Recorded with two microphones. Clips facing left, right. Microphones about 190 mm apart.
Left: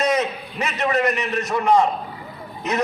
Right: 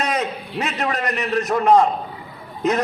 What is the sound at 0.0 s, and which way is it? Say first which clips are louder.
A man's voice: left 3 dB; 60° right (ahead or behind).